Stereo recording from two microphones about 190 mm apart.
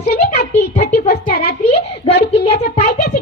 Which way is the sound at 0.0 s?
60° left (ahead or behind).